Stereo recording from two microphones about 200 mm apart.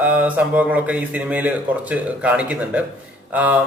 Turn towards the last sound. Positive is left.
turn(degrees=-5)  # may be behind; listen again after turning